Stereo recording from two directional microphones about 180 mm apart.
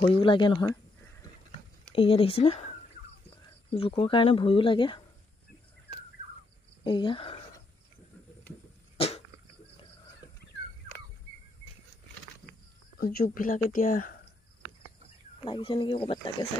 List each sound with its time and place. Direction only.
0.0 s speech: 30° left (ahead or behind)
2.0 s speech: 30° left (ahead or behind)
3.7 s speech: 30° left (ahead or behind)
6.8 s speech: 25° left (ahead or behind)
8.9 s cough: 35° left (ahead or behind)
13.0 s speech: 55° left (ahead or behind)
15.4 s speech: 25° left (ahead or behind)